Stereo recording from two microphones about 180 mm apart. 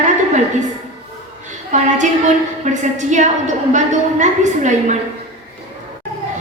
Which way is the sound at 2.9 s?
40° right (ahead or behind).